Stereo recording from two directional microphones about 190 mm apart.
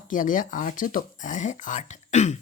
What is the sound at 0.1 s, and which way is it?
Speech, 45° left (ahead or behind).